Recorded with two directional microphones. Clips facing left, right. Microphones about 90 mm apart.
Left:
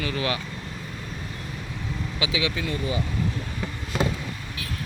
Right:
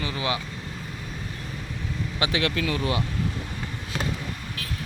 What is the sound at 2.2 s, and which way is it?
Speech, 60° right (ahead or behind).